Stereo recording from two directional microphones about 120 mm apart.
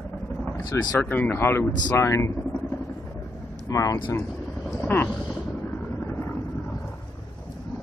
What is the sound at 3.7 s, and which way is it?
Speech, 25° left (ahead or behind).